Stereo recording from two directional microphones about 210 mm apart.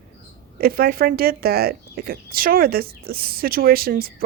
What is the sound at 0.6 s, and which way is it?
Speech, 45° right (ahead or behind).